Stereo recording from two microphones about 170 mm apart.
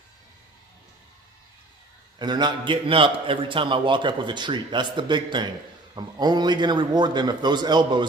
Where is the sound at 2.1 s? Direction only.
25° right (ahead or behind).